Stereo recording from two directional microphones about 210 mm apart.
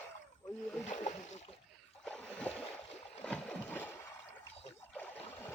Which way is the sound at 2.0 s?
5° left (ahead or behind).